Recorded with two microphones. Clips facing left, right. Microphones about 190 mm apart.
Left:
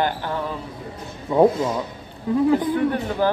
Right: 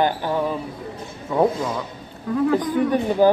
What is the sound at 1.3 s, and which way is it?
Speech, 15° left (ahead or behind).